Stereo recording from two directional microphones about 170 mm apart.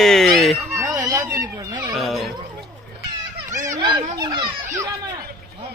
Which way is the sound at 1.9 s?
Centre (ahead or behind).